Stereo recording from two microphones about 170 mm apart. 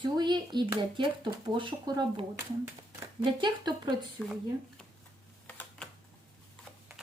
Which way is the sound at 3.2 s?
25° right (ahead or behind).